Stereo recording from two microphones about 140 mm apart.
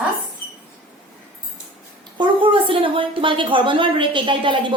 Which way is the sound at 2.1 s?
35° right (ahead or behind).